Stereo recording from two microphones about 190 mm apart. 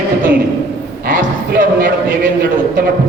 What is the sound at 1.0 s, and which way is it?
Speech, 45° right (ahead or behind).